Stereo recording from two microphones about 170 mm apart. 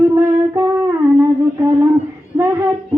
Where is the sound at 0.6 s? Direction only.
15° right (ahead or behind).